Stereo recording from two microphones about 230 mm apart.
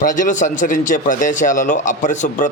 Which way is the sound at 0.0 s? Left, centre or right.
Left.